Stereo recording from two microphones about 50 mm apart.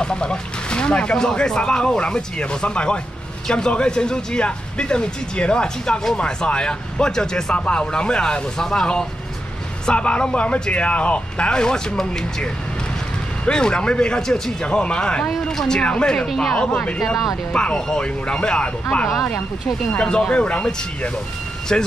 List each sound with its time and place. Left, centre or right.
0.0 s speech: centre
13.5 s speech: centre
16.2 s speech: centre
16.5 s speech: centre
17.0 s speech: centre
17.5 s speech: centre